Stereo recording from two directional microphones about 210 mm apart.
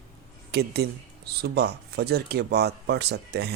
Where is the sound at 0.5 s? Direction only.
50° right (ahead or behind).